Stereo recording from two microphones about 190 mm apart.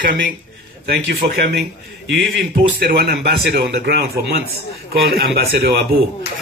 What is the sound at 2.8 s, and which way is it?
A man's voice, 60° right (ahead or behind).